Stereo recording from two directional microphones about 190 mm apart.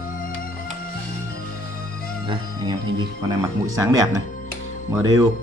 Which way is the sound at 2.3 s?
25° right (ahead or behind).